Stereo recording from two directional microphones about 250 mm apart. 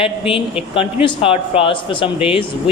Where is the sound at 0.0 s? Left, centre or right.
Left.